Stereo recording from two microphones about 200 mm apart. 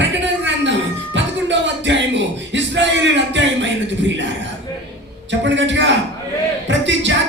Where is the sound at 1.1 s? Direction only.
65° right (ahead or behind).